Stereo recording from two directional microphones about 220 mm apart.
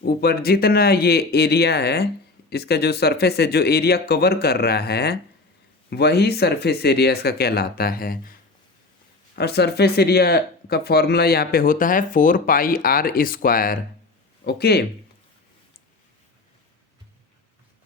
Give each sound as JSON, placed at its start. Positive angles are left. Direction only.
{"t": 0.0, "sound": "speech", "side_deg": 45}
{"t": 9.3, "sound": "speech", "side_deg": 50}